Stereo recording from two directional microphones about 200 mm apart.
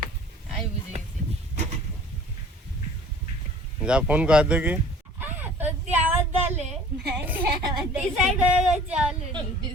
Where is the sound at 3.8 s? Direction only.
5° right (ahead or behind).